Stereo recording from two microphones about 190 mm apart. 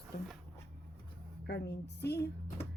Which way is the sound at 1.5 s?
65° left (ahead or behind).